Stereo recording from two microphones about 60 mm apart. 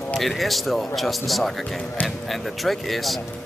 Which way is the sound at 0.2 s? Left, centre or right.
Centre.